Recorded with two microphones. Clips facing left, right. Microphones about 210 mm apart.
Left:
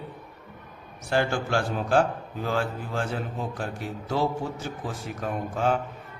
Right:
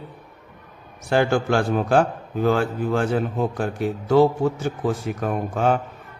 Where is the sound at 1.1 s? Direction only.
60° right (ahead or behind).